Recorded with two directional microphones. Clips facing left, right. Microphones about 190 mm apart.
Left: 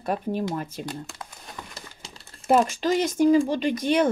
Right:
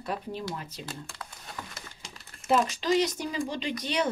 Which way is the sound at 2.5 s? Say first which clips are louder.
Left 4 dB; 50° left (ahead or behind).